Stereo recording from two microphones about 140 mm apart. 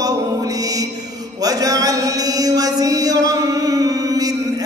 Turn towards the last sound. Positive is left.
turn(degrees=-25)  # may be behind; listen again after turning